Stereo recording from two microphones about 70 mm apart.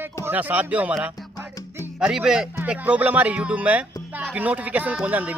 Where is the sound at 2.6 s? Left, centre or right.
Right.